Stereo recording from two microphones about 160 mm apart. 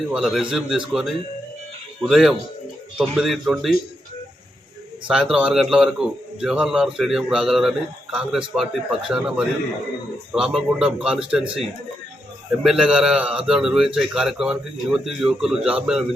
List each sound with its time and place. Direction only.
0.1 s a man's voice: centre (ahead or behind)
5.0 s a man's voice: 5° right (ahead or behind)
12.6 s a man's voice: 5° right (ahead or behind)